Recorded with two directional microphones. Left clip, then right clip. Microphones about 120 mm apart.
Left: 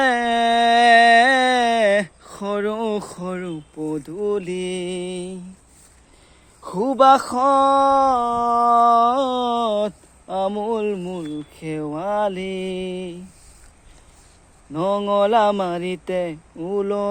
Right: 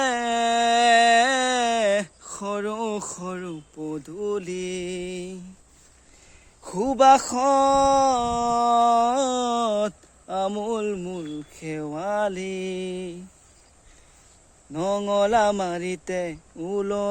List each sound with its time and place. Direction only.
0.0 s a sound: 5° right (ahead or behind)
6.6 s speech: 40° right (ahead or behind)
14.7 s speech: 40° right (ahead or behind)